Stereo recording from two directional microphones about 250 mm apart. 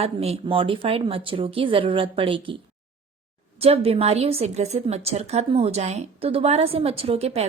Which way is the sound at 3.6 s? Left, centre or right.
Right.